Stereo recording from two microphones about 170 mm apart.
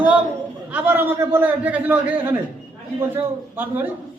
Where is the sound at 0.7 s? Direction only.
10° right (ahead or behind).